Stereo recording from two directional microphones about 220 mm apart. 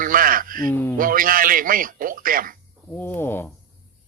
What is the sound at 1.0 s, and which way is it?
Speech, 40° right (ahead or behind).